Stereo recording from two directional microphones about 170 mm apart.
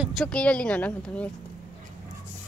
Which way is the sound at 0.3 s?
5° left (ahead or behind).